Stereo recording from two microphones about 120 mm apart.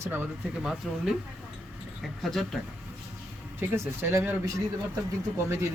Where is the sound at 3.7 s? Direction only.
20° right (ahead or behind).